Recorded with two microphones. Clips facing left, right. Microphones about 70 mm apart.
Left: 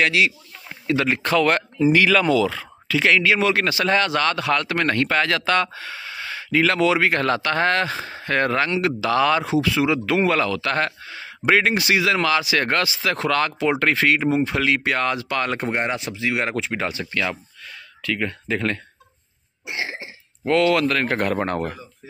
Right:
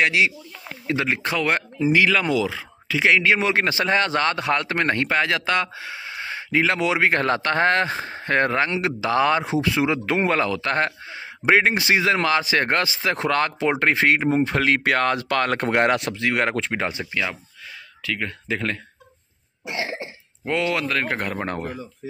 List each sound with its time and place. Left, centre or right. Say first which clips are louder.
0.0 s speech: even; right
1.0 s speech: left 5 dB; centre; by 16.8 s right
17.0 s speech: left 1 dB; centre
20.4 s speech: left 5 dB; centre